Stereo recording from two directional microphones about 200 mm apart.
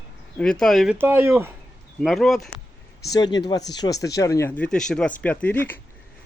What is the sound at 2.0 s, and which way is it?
Speech, centre (ahead or behind).